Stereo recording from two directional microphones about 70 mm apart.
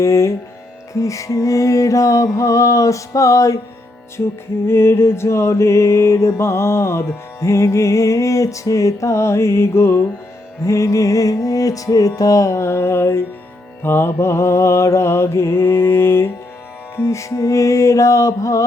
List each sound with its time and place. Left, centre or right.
0.0 s mantra: left
4.6 s mantra: left
10.7 s mantra: left
17.0 s mantra: left